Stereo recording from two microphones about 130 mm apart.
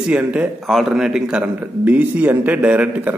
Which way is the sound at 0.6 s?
Centre (ahead or behind).